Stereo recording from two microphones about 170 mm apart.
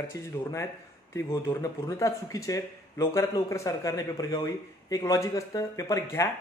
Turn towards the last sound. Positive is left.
turn(degrees=20)  # may be behind; listen again after turning